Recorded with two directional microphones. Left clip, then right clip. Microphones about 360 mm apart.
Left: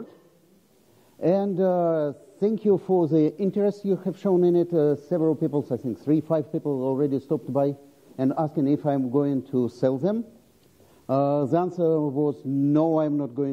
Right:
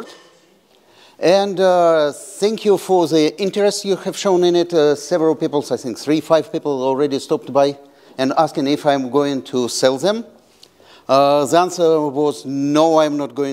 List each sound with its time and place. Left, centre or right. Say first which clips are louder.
1.2 s speech: right 9 dB; centre
6.6 s a man's voice: right 8 dB; right
6.9 s speech: right 8 dB; centre
12.3 s speech: right 5 dB; centre